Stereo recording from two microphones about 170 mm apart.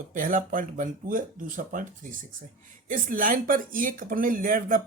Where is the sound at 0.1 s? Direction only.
50° right (ahead or behind).